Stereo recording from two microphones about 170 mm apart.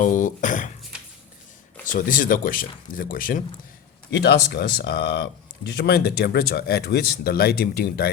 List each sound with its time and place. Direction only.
0.0 s speech: 50° left (ahead or behind)
0.9 s a sound: 5° right (ahead or behind)
1.8 s speech: 50° left (ahead or behind)
4.1 s speech: 75° left (ahead or behind)